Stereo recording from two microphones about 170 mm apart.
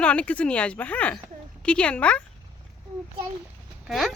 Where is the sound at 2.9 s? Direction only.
40° right (ahead or behind).